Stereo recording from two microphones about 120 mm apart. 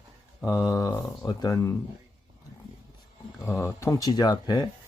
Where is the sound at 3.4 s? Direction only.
25° left (ahead or behind).